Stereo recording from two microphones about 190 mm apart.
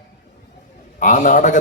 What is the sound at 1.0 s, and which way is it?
Speech, 45° left (ahead or behind).